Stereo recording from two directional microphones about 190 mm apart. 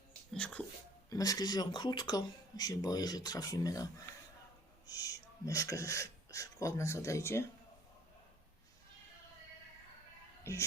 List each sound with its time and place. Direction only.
0.3 s a sound: 5° left (ahead or behind)
1.1 s speech: 20° left (ahead or behind)
4.9 s speech: 20° left (ahead or behind)
10.4 s music: 15° left (ahead or behind)